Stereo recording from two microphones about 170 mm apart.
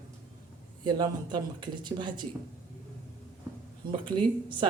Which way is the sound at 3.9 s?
30° right (ahead or behind).